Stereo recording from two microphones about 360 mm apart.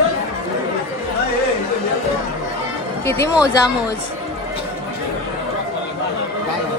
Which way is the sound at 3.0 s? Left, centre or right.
Centre.